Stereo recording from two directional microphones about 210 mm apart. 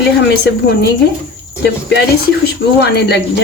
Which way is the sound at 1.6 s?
55° left (ahead or behind).